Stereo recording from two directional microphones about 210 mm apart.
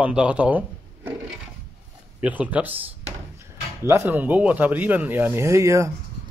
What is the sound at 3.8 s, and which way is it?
Speech, 10° right (ahead or behind).